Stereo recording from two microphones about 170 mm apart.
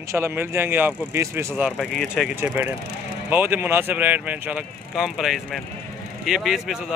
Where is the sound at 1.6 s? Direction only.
Centre (ahead or behind).